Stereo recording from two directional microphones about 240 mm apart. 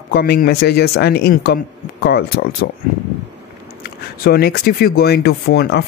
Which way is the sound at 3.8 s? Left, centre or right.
Left.